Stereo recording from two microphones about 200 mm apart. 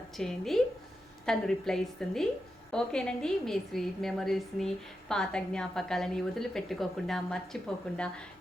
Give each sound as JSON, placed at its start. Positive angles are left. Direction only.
{"t": 0.2, "sound": "a woman's voice", "side_deg": 0}